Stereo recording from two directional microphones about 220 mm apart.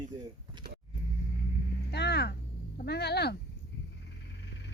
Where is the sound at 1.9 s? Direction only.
50° left (ahead or behind).